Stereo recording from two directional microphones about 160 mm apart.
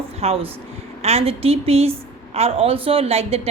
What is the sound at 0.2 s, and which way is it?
A woman's voice, 40° right (ahead or behind).